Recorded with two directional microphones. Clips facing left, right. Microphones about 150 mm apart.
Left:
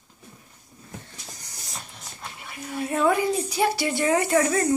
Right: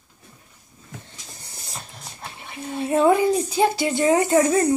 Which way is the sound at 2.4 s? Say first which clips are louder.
Right 3 dB; 25° right (ahead or behind).